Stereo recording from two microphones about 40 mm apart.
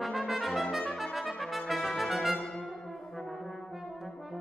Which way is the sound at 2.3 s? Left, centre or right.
Centre.